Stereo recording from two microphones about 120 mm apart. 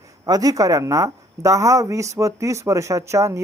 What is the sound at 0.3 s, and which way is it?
Speech, 30° right (ahead or behind).